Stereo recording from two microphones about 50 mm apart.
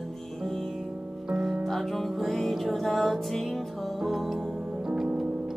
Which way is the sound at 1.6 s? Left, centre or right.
Centre.